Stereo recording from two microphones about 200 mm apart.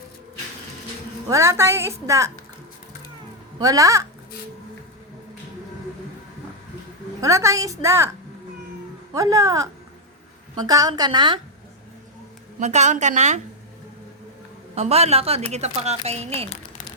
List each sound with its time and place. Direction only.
1.3 s a woman's voice: 15° right (ahead or behind)
3.6 s a woman's voice: 15° right (ahead or behind)
7.2 s a woman's voice: 15° right (ahead or behind)
9.1 s a woman's voice: 15° right (ahead or behind)
12.5 s a woman's voice: 35° right (ahead or behind)
14.8 s a woman's voice: 30° right (ahead or behind)